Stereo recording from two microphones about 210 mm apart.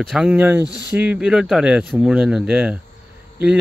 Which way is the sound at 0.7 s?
15° left (ahead or behind).